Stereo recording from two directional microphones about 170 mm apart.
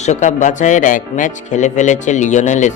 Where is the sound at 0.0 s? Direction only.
45° left (ahead or behind).